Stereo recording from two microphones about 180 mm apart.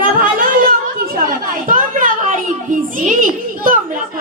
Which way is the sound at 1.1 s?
55° right (ahead or behind).